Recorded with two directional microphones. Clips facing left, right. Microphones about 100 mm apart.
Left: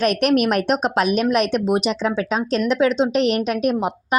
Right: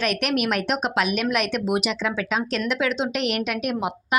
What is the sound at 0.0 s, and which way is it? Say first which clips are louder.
Speech: left 6 dB; 40° left (ahead or behind).